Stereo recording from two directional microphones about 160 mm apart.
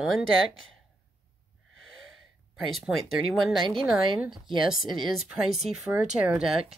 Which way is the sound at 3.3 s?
Centre (ahead or behind).